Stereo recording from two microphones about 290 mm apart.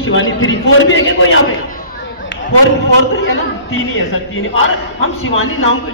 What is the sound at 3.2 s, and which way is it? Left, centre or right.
A woman's voice, left.